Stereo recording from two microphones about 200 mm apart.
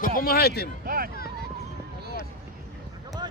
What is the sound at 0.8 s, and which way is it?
Speech, 45° right (ahead or behind).